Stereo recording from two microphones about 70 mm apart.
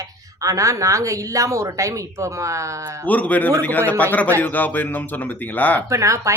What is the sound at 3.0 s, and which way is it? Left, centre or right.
Speech, left.